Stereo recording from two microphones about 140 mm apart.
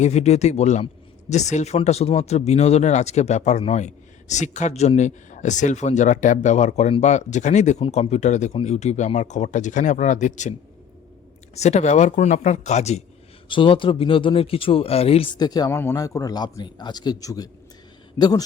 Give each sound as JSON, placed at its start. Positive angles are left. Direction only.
{"t": 0.0, "sound": "speech", "side_deg": 50}
{"t": 11.5, "sound": "speech", "side_deg": 50}
{"t": 13.5, "sound": "speech", "side_deg": 35}
{"t": 15.4, "sound": "a man's voice", "side_deg": 30}